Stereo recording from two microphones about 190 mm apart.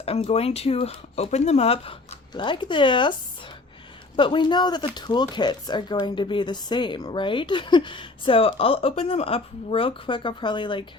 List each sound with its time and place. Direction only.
0.0 s speech: 30° left (ahead or behind)
4.2 s speech: 25° left (ahead or behind)